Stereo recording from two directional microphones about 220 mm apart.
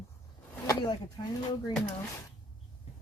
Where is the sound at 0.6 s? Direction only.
15° left (ahead or behind).